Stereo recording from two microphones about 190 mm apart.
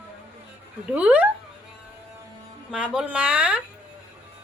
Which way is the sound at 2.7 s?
5° right (ahead or behind).